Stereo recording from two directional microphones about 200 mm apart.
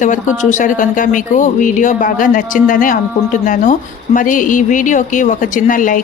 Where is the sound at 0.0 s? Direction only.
40° left (ahead or behind).